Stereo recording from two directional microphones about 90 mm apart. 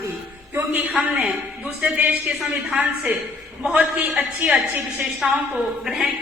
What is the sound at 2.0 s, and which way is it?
Speech, 15° right (ahead or behind).